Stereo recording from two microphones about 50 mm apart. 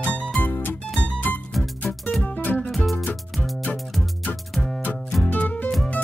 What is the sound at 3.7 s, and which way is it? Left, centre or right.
Music, centre.